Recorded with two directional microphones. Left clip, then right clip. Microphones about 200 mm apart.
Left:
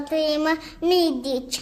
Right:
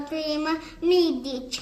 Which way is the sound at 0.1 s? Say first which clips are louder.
Left 6 dB; 35° left (ahead or behind).